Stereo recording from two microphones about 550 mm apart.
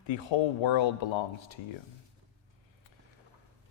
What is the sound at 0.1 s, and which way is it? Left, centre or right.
Speech, left.